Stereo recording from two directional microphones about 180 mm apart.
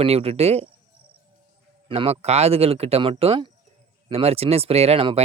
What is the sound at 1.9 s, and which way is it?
Speech, 35° right (ahead or behind).